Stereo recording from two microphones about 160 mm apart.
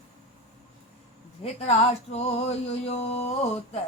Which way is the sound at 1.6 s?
40° left (ahead or behind).